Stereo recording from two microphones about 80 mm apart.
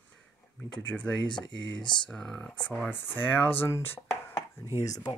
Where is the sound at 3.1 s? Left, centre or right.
Left.